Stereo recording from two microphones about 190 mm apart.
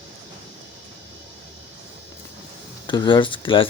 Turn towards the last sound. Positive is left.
turn(degrees=25)  # may be behind; listen again after turning